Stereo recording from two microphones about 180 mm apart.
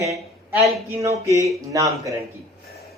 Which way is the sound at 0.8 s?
15° right (ahead or behind).